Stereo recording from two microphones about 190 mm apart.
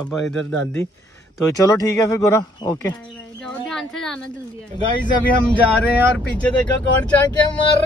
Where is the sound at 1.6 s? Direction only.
15° left (ahead or behind).